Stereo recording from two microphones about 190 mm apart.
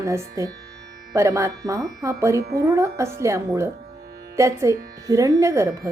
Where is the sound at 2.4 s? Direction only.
55° right (ahead or behind).